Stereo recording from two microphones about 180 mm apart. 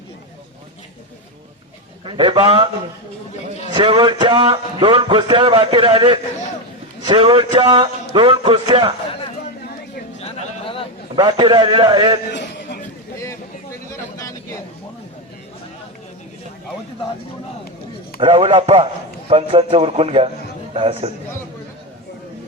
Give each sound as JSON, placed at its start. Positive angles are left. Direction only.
{"t": 2.0, "sound": "a man's voice", "side_deg": -25}
{"t": 3.7, "sound": "a man's voice", "side_deg": -25}
{"t": 10.2, "sound": "a sound", "side_deg": 35}
{"t": 11.1, "sound": "a man's voice", "side_deg": -25}
{"t": 12.3, "sound": "a sound", "side_deg": 75}
{"t": 13.9, "sound": "vehicle", "side_deg": 15}
{"t": 18.2, "sound": "a man's voice", "side_deg": -30}